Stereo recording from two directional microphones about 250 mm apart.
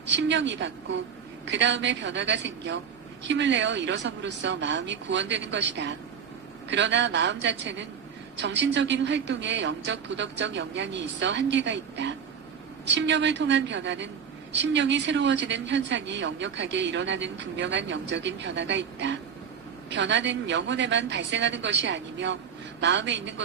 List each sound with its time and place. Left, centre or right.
0.0 s speech: right